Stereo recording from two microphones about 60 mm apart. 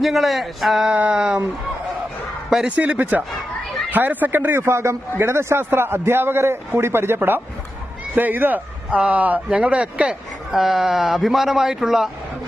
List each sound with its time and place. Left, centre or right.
0.0 s a man's voice: centre
0.9 s speech: centre
2.6 s a man's voice: right
10.5 s a man's voice: centre